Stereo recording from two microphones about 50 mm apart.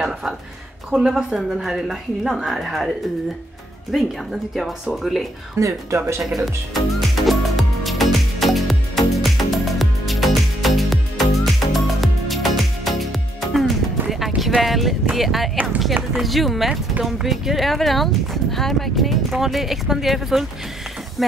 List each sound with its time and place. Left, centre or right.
0.9 s speech: centre
4.9 s speech: centre
5.6 s speech: right
5.9 s speech: right
6.3 s music: centre
14.6 s a sound: centre
15.1 s speech: centre
21.2 s a sound: centre